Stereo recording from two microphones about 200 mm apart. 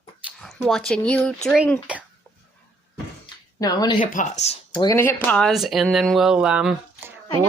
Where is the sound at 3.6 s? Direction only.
20° left (ahead or behind).